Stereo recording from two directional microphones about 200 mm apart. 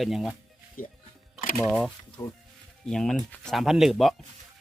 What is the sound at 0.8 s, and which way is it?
Speech, 40° left (ahead or behind).